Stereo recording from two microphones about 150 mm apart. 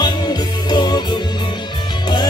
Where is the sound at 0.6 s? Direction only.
30° left (ahead or behind).